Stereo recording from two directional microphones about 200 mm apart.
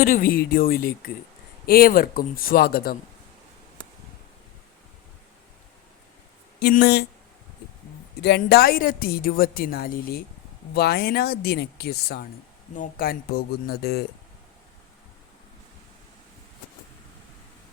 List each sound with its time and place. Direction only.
0.0 s a woman's voice: 45° left (ahead or behind)
6.6 s a woman's voice: 50° left (ahead or behind)
8.2 s a woman's voice: 55° left (ahead or behind)